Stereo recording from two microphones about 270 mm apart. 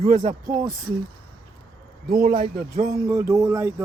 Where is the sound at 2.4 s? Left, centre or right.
Right.